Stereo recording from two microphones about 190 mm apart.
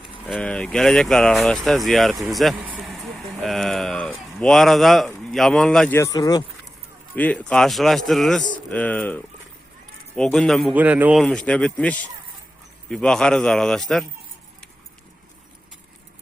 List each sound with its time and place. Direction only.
0.3 s speech: 5° left (ahead or behind)
6.0 s speech: 20° left (ahead or behind)
7.2 s speech: 5° left (ahead or behind)
11.2 s speech: 5° left (ahead or behind)